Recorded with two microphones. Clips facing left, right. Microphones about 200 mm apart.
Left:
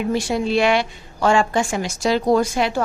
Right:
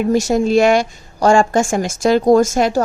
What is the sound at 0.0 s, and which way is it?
A woman's voice, 45° right (ahead or behind).